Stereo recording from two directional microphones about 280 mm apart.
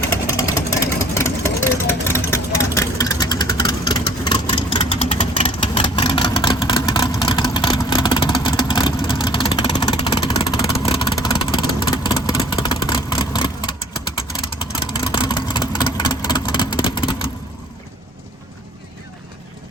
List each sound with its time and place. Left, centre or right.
0.1 s vehicle: centre